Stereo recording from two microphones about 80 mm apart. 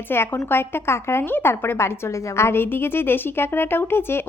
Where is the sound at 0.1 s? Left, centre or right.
Left.